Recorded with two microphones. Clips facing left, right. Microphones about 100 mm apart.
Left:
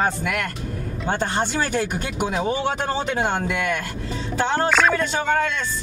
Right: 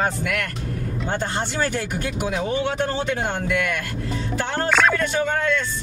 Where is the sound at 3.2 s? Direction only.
40° left (ahead or behind).